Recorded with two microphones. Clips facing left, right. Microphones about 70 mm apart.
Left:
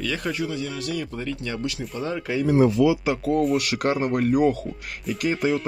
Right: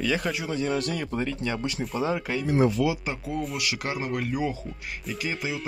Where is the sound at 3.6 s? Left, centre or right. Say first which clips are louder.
Left 7 dB; left.